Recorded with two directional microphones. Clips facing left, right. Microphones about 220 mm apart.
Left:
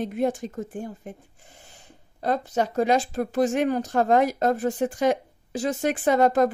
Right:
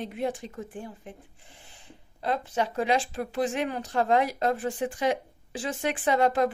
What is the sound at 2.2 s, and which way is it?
Speech, 40° left (ahead or behind).